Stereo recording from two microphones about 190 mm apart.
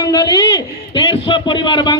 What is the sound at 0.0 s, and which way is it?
A man's voice, 20° left (ahead or behind).